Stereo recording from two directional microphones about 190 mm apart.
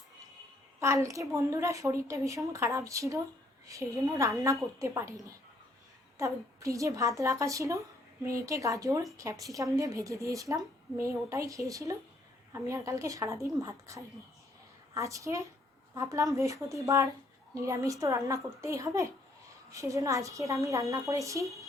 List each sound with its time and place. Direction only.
0.8 s a woman's voice: 15° right (ahead or behind)